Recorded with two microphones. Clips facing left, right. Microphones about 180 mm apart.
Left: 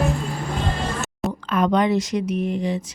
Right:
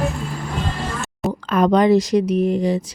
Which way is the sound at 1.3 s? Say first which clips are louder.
Right 4 dB; 40° right (ahead or behind).